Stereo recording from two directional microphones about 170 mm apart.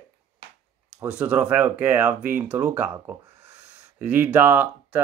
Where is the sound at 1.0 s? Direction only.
10° right (ahead or behind).